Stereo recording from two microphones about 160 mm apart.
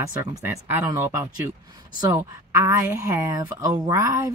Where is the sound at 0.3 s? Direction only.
15° right (ahead or behind).